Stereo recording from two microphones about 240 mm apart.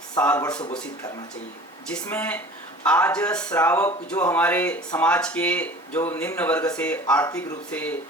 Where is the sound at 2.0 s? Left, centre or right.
Centre.